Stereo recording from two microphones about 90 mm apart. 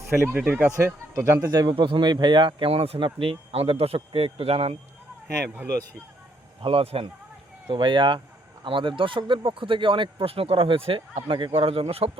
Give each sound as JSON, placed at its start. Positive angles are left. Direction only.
{"t": 0.1, "sound": "speech", "side_deg": -30}
{"t": 0.4, "sound": "speech", "side_deg": -15}
{"t": 1.1, "sound": "speech", "side_deg": -30}
{"t": 1.5, "sound": "speech", "side_deg": -50}
{"t": 1.7, "sound": "speech", "side_deg": -60}
{"t": 6.6, "sound": "speech", "side_deg": -90}
{"t": 7.7, "sound": "speech", "side_deg": -65}
{"t": 11.5, "sound": "speech", "side_deg": -90}